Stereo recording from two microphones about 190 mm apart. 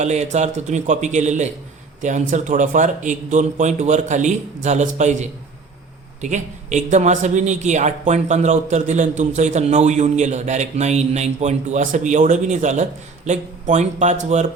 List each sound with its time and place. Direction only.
0.0 s a man's voice: 35° right (ahead or behind)